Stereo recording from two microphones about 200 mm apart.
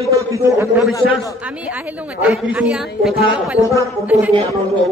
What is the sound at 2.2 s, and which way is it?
A man's voice, 5° right (ahead or behind).